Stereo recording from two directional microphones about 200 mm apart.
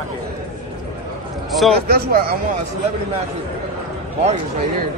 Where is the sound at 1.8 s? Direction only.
50° right (ahead or behind).